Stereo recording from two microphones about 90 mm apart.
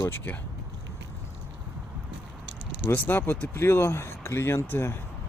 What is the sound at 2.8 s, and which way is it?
Speech, 25° left (ahead or behind).